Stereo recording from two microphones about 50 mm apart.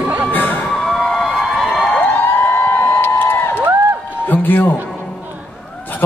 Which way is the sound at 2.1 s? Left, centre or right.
Left.